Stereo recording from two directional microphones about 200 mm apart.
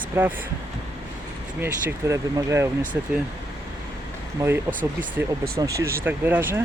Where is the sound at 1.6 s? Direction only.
15° right (ahead or behind).